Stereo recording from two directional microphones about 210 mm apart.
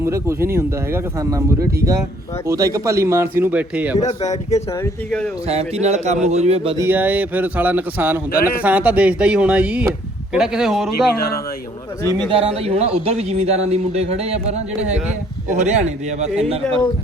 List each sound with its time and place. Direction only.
0.0 s a man's voice: 10° right (ahead or behind)
2.5 s a man's voice: 15° right (ahead or behind)
4.0 s speech: 30° left (ahead or behind)
4.8 s speech: 5° left (ahead or behind)
5.5 s speech: 30° right (ahead or behind)
6.7 s a man's voice: 10° right (ahead or behind)
12.3 s speech: 30° right (ahead or behind)